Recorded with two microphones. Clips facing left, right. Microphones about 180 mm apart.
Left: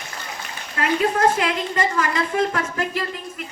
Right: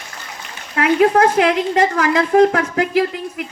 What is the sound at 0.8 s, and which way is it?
A woman's voice, 70° right (ahead or behind).